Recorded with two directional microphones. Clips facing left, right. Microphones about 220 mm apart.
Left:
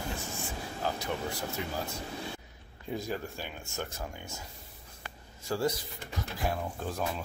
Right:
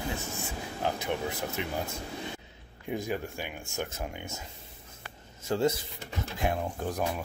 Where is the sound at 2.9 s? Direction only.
15° right (ahead or behind).